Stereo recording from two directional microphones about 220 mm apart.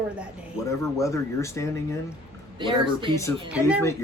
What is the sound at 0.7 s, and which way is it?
Speech, 15° left (ahead or behind).